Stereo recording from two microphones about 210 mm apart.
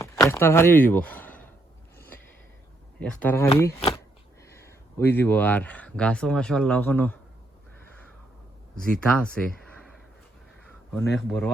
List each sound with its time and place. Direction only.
0.0 s speech: 15° left (ahead or behind)
3.0 s speech: 5° left (ahead or behind)
3.8 s speech: 25° left (ahead or behind)
4.4 s speech: 15° left (ahead or behind)
8.7 s speech: 5° left (ahead or behind)
11.1 s speech: 5° left (ahead or behind)